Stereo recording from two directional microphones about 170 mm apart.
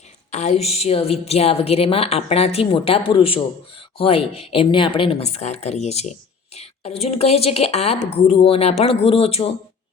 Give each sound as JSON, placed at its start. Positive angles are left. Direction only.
{"t": 0.3, "sound": "a woman's voice", "side_deg": 45}